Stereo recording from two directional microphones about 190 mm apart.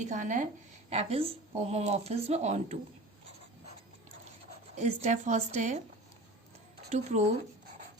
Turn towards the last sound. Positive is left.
turn(degrees=-35)  # may be behind; listen again after turning